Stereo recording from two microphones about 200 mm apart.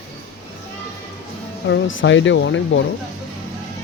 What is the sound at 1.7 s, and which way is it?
Speech, 70° left (ahead or behind).